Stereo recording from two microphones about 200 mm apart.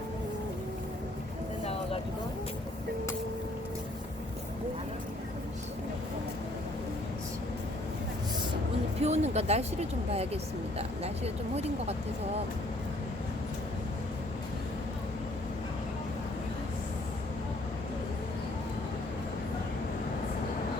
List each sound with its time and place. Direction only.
9.0 s speech: 35° right (ahead or behind)
10.8 s speech: 30° right (ahead or behind)